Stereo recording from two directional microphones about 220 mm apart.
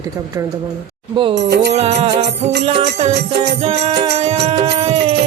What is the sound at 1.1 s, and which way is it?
Music, 25° right (ahead or behind).